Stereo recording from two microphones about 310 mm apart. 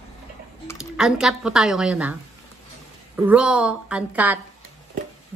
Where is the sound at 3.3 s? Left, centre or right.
Centre.